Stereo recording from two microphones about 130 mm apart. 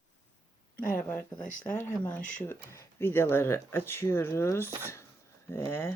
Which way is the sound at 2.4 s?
20° left (ahead or behind).